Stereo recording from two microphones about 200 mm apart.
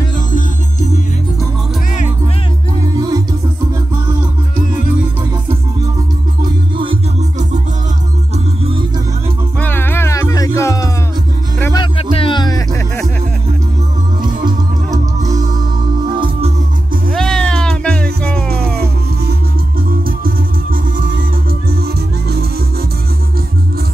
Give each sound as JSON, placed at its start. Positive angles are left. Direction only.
{"t": 0.3, "sound": "music", "side_deg": 40}
{"t": 6.8, "sound": "music", "side_deg": -30}
{"t": 9.6, "sound": "music", "side_deg": 10}
{"t": 14.2, "sound": "music", "side_deg": -20}
{"t": 16.2, "sound": "music", "side_deg": -30}
{"t": 17.1, "sound": "music", "side_deg": 5}
{"t": 20.1, "sound": "music", "side_deg": -45}